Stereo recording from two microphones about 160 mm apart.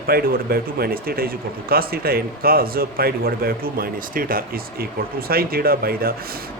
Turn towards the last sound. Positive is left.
turn(degrees=-70)  # may be behind; listen again after turning